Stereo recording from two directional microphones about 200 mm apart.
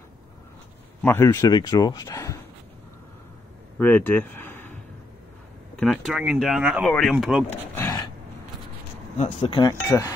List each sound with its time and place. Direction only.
1.0 s a man's voice: 15° left (ahead or behind)
3.8 s speech: 10° left (ahead or behind)
5.8 s speech: centre (ahead or behind)
7.7 s a sound: 15° left (ahead or behind)
9.2 s speech: 25° left (ahead or behind)
9.7 s a man's voice: 15° left (ahead or behind)